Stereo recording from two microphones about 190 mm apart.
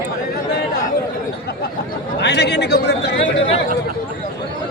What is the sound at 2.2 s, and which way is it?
Speech, 60° left (ahead or behind).